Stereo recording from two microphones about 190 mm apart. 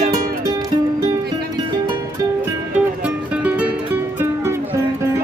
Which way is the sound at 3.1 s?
5° right (ahead or behind).